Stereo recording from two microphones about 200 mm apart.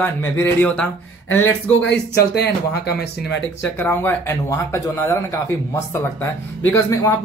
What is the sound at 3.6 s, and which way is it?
Speech, 10° left (ahead or behind).